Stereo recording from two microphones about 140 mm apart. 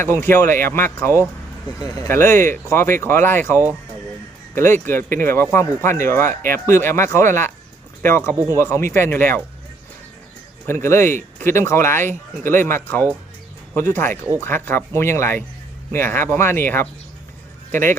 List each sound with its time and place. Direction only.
0.0 s speech: 15° left (ahead or behind)
10.7 s speech: 20° left (ahead or behind)